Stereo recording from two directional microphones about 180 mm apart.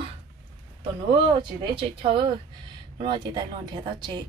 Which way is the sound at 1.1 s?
25° right (ahead or behind).